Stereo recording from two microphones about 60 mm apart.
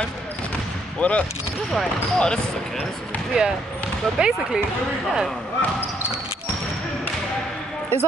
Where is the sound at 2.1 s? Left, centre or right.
Centre.